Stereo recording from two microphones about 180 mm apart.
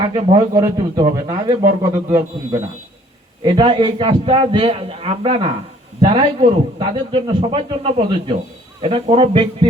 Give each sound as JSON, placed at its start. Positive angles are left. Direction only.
{"t": 0.0, "sound": "a man's voice", "side_deg": -20}